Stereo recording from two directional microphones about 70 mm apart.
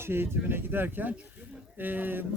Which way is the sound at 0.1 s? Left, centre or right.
Right.